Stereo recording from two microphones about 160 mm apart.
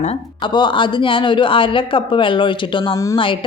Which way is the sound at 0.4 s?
30° left (ahead or behind).